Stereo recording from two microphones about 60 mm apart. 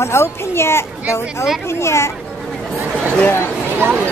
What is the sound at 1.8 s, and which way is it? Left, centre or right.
Speech, left.